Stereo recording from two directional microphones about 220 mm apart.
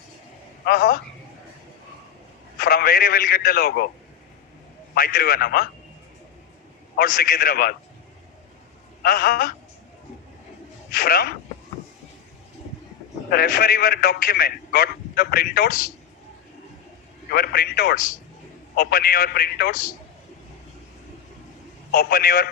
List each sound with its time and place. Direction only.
0.6 s a woman's voice: 45° left (ahead or behind)
2.6 s speech: 45° left (ahead or behind)
4.9 s speech: 45° left (ahead or behind)
6.9 s speech: 45° left (ahead or behind)
9.0 s speech: 45° left (ahead or behind)
10.9 s speech: 45° left (ahead or behind)
13.3 s speech: 45° left (ahead or behind)
17.3 s speech: 45° left (ahead or behind)
21.9 s speech: 45° left (ahead or behind)